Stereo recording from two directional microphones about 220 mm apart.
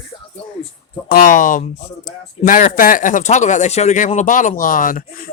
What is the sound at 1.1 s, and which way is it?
Speech, 35° left (ahead or behind).